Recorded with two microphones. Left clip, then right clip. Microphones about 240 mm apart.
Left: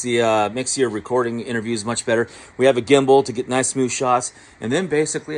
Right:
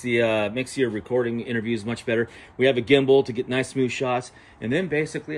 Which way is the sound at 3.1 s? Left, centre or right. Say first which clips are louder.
Left 4 dB; centre.